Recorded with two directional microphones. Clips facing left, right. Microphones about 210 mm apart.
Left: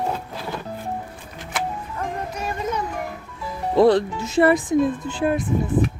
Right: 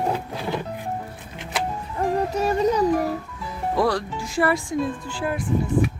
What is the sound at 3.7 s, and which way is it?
Speech, 25° left (ahead or behind).